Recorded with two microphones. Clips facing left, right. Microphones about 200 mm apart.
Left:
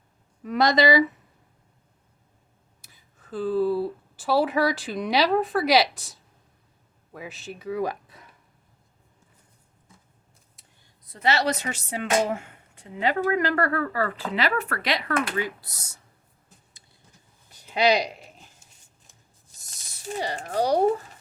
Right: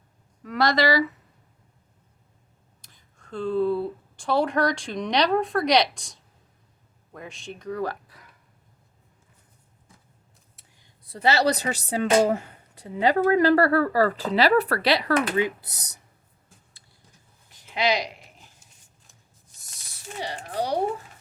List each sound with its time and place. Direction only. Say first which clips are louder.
0.4 s speech: left 2 dB; 20° left (ahead or behind)
2.8 s speech: even; 5° left (ahead or behind); by 8.3 s 25° left (ahead or behind)
11.0 s speech: right 3 dB; 30° right (ahead or behind)
15.4 s speech: right 5 dB; 20° right (ahead or behind)
20.2 s speech: left 4 dB; 45° left (ahead or behind)